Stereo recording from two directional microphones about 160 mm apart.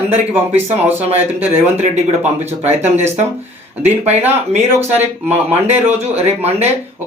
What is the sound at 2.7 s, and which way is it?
Speech, 45° right (ahead or behind).